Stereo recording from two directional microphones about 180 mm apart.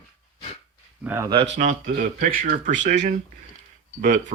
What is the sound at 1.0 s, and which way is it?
Speech, 15° right (ahead or behind).